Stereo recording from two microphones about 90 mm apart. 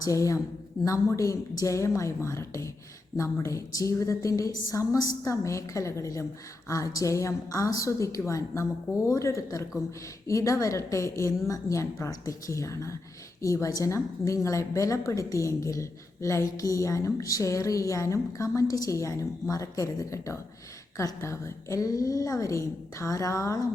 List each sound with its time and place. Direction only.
0.0 s a woman's voice: 35° left (ahead or behind)